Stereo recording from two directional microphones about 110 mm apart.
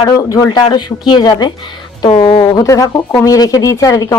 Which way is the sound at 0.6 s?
40° left (ahead or behind).